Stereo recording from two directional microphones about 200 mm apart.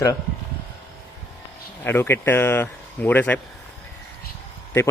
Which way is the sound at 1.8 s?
10° left (ahead or behind).